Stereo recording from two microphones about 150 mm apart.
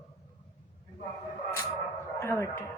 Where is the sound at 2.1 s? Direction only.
20° left (ahead or behind).